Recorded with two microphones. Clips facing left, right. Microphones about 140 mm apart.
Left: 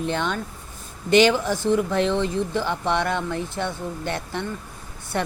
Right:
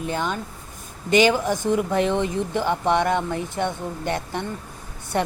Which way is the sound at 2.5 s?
50° right (ahead or behind).